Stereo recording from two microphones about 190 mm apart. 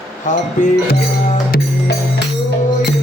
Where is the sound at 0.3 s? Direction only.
40° left (ahead or behind).